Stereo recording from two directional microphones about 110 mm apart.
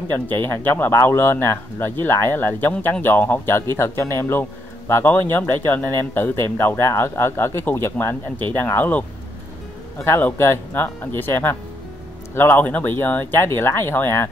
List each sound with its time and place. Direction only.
0.1 s speech: 20° left (ahead or behind)
10.0 s speech: 20° left (ahead or behind)